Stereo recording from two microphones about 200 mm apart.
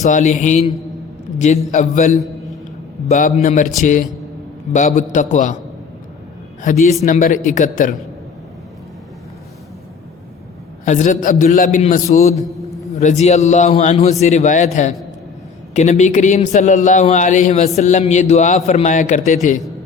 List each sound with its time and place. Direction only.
0.1 s a man's voice: 40° left (ahead or behind)
1.7 s a man's voice: 40° left (ahead or behind)
4.7 s a man's voice: 40° left (ahead or behind)
6.6 s a man's voice: 40° left (ahead or behind)
10.8 s a man's voice: 35° left (ahead or behind)
12.3 s mantra: centre (ahead or behind)
13.0 s a man's voice: 35° left (ahead or behind)